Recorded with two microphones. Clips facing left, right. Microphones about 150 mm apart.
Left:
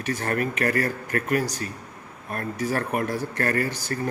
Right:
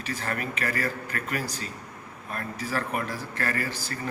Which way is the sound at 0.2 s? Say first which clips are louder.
Left 6 dB; 50° left (ahead or behind).